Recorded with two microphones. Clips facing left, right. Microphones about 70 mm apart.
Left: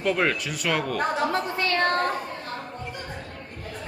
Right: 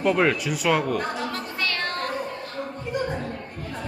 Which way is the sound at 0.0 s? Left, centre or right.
Centre.